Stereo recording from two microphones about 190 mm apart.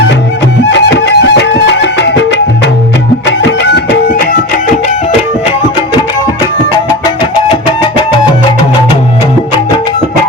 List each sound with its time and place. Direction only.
0.6 s music: 70° left (ahead or behind)